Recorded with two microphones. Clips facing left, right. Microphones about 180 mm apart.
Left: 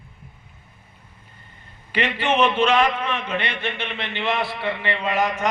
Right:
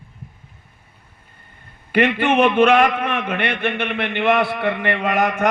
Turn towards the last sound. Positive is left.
turn(degrees=-55)  # may be behind; listen again after turning